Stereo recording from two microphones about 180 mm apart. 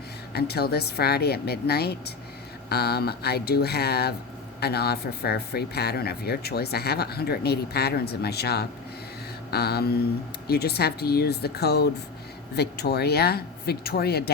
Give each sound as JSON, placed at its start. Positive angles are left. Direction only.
{"t": 0.3, "sound": "speech", "side_deg": 60}